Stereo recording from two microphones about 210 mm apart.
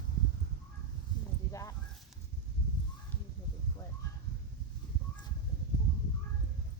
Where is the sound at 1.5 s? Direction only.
15° left (ahead or behind).